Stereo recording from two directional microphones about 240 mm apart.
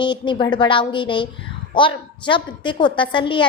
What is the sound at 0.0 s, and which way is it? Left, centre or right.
A woman's voice, centre.